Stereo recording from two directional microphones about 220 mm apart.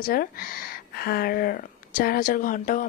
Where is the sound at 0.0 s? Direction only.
40° left (ahead or behind).